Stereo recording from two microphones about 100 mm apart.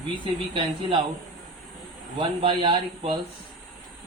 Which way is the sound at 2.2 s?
60° right (ahead or behind).